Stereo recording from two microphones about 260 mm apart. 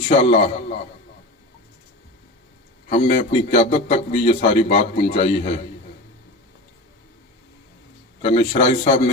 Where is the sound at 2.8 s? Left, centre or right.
Left.